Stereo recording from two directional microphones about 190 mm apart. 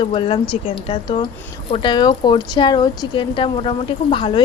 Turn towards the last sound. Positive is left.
turn(degrees=25)  # may be behind; listen again after turning